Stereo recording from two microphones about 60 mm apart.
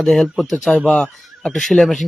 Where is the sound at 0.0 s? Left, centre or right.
Centre.